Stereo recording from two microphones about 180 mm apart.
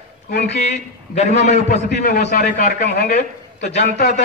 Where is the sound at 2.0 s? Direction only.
55° left (ahead or behind).